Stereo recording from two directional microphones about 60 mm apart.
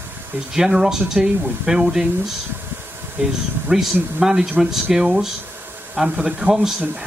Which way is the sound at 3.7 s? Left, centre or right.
Centre.